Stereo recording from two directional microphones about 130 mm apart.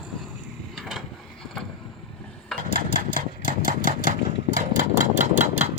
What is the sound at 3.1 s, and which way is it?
Engine, 90° right.